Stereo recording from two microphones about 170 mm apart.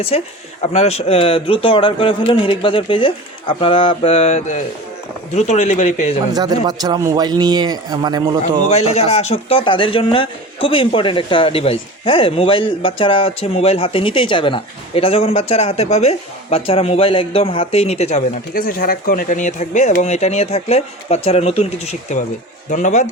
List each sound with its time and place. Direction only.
0.1 s speech: 40° left (ahead or behind)
6.3 s speech: 25° right (ahead or behind)
8.7 s speech: 35° left (ahead or behind)
18.5 s speech: 55° left (ahead or behind)